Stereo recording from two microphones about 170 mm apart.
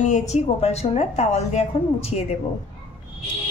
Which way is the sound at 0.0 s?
45° left (ahead or behind).